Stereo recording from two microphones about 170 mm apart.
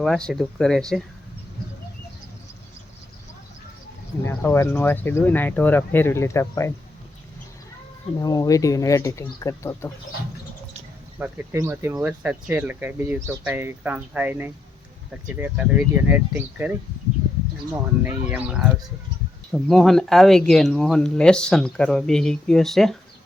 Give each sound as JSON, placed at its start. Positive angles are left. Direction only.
{"t": 0.0, "sound": "speech", "side_deg": 5}
{"t": 4.3, "sound": "speech", "side_deg": 15}
{"t": 8.2, "sound": "speech", "side_deg": 20}
{"t": 11.2, "sound": "speech", "side_deg": -15}
{"t": 18.0, "sound": "speech", "side_deg": -10}